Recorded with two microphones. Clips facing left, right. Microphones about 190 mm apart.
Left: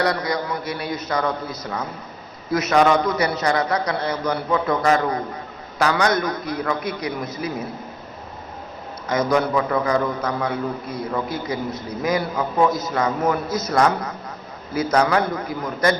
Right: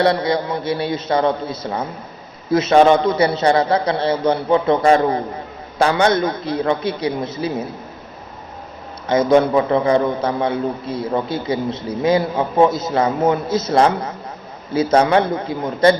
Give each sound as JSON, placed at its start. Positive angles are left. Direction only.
{"t": 0.0, "sound": "a man's voice", "side_deg": -25}
{"t": 9.0, "sound": "a man's voice", "side_deg": -25}